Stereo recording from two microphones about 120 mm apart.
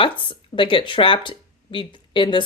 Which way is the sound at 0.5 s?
45° left (ahead or behind).